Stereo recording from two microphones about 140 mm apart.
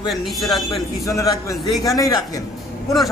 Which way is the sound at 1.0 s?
25° left (ahead or behind).